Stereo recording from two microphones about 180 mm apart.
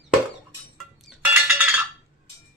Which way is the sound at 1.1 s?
10° right (ahead or behind).